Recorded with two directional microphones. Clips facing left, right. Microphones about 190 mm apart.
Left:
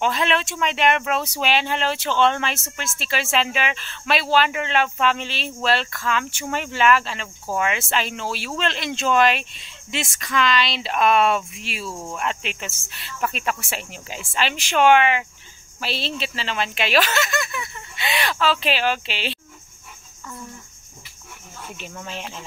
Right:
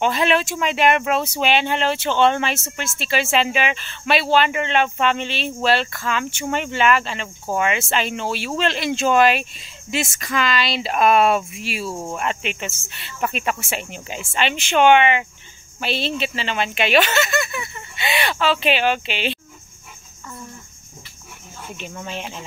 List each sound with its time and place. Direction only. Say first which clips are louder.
0.0 s speech: right 3 dB; 5° right (ahead or behind)
11.9 s cricket: right 4 dB; 25° right (ahead or behind)
12.2 s speech: right 2 dB; centre (ahead or behind)
21.6 s speech: right 3 dB; centre (ahead or behind)